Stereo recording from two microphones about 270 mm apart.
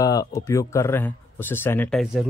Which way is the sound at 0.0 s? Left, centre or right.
Centre.